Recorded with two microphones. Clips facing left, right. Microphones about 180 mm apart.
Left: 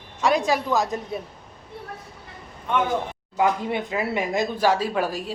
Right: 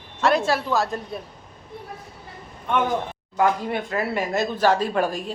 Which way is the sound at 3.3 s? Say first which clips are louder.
Right 1 dB; 15° left (ahead or behind).